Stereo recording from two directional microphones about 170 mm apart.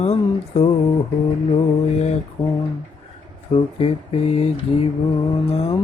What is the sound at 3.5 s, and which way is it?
Speech, 35° left (ahead or behind).